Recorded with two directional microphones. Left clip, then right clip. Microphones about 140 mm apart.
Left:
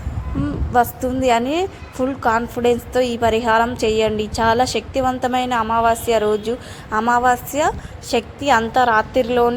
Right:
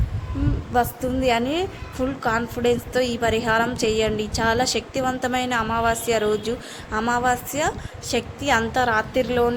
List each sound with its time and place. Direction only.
0.7 s a woman's voice: 25° left (ahead or behind)
7.3 s a woman's voice: 20° left (ahead or behind)